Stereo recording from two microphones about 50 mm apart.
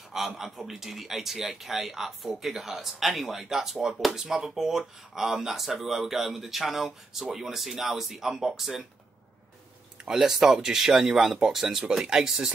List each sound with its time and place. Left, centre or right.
0.4 s speech: centre
10.0 s speech: centre